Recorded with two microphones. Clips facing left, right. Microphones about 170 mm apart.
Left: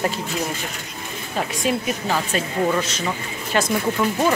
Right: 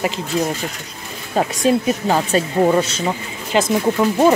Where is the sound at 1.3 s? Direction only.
35° right (ahead or behind).